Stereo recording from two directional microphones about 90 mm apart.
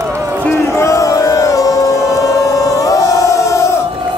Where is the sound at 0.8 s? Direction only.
35° left (ahead or behind).